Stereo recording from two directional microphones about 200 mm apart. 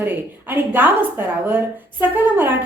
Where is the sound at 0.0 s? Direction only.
10° right (ahead or behind).